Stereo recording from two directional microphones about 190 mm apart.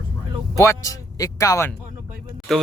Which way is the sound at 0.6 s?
15° left (ahead or behind).